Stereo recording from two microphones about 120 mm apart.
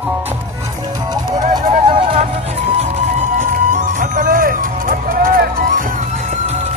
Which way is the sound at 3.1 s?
90° right.